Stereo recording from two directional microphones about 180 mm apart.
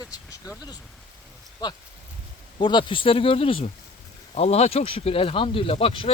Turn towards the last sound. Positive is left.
turn(degrees=30)  # may be behind; listen again after turning